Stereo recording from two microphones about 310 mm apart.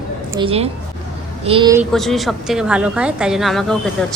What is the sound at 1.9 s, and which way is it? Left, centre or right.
Speech, centre.